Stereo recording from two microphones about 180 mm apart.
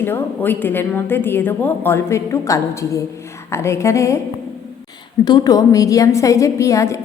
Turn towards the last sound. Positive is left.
turn(degrees=15)  # may be behind; listen again after turning